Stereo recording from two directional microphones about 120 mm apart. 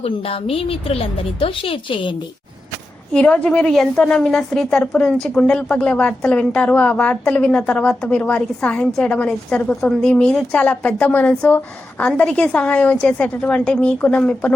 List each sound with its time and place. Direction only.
0.0 s a woman's voice: 55° left (ahead or behind)
3.1 s speech: 10° left (ahead or behind)